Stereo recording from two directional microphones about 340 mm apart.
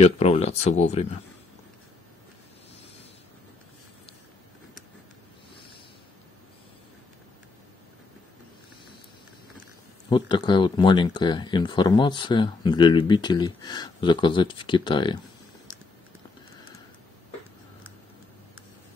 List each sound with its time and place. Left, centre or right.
0.0 s speech: centre
10.0 s speech: centre